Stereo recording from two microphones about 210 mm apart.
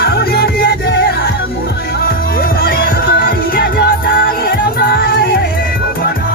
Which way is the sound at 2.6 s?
45° left (ahead or behind).